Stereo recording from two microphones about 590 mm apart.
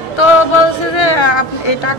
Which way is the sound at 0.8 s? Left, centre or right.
Left.